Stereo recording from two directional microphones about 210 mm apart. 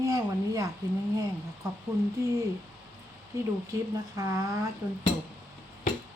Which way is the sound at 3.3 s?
15° right (ahead or behind).